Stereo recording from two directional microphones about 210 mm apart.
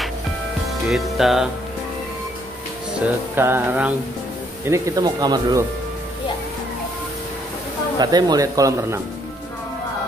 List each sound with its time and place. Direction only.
0.8 s music: centre (ahead or behind)
3.3 s speech: 10° right (ahead or behind)
8.0 s speech: 20° right (ahead or behind)